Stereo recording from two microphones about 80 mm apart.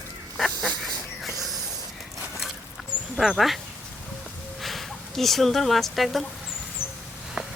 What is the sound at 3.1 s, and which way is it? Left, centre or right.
Speech, centre.